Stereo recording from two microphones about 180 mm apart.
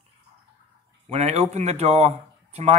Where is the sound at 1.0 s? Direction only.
35° right (ahead or behind).